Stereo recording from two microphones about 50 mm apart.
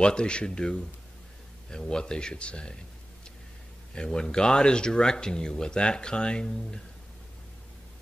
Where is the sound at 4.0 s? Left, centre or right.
Centre.